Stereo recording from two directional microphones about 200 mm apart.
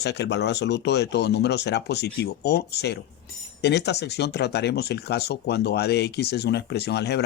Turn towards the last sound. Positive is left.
turn(degrees=55)  # may be behind; listen again after turning